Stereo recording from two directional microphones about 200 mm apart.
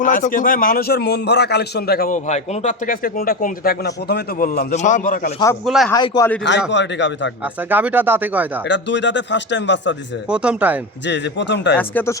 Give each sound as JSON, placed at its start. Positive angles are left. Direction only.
{"t": 0.0, "sound": "a man's voice", "side_deg": 40}
{"t": 5.6, "sound": "speech", "side_deg": 0}
{"t": 5.9, "sound": "a man's voice", "side_deg": 15}
{"t": 6.7, "sound": "speech", "side_deg": 65}
{"t": 7.4, "sound": "speech", "side_deg": -10}
{"t": 8.6, "sound": "speech", "side_deg": 65}
{"t": 10.2, "sound": "speech", "side_deg": -5}
{"t": 11.0, "sound": "speech", "side_deg": 60}
{"t": 11.8, "sound": "a man's voice", "side_deg": 10}